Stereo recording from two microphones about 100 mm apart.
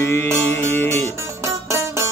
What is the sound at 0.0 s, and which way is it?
Music, 25° left (ahead or behind).